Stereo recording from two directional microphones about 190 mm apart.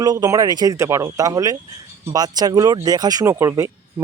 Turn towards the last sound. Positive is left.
turn(degrees=-15)  # may be behind; listen again after turning